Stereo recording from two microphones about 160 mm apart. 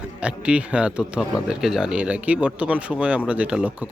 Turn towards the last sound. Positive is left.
turn(degrees=-10)  # may be behind; listen again after turning